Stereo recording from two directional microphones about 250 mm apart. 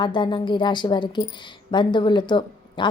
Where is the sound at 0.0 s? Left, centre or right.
Centre.